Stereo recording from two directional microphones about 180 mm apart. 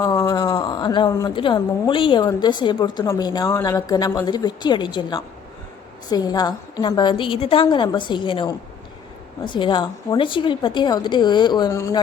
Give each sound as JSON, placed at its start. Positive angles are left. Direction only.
{"t": 0.0, "sound": "speech", "side_deg": 20}